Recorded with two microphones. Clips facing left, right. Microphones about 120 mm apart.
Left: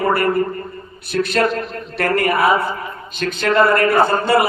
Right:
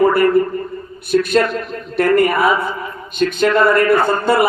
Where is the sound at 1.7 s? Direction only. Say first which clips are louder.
Right 5 dB; 60° left (ahead or behind).